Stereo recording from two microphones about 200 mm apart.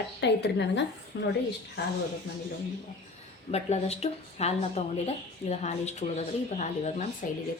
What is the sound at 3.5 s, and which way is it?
Speech, 30° left (ahead or behind).